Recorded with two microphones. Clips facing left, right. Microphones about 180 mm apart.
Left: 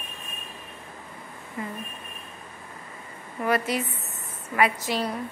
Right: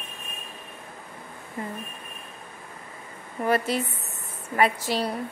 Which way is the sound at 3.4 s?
30° right (ahead or behind).